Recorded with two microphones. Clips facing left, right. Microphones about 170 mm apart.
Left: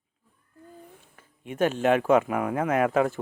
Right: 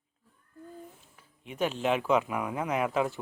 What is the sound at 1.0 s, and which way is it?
Speech, 50° left (ahead or behind).